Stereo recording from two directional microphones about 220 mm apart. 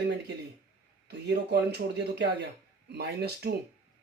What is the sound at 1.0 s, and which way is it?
Speech, 50° right (ahead or behind).